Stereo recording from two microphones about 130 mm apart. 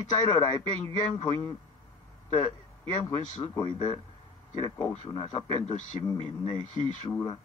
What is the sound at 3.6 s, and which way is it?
Speech, 35° left (ahead or behind).